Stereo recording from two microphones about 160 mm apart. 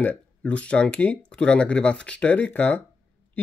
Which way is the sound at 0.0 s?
10° left (ahead or behind).